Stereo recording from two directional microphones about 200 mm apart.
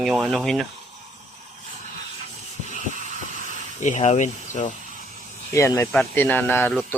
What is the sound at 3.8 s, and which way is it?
Speech, 35° left (ahead or behind).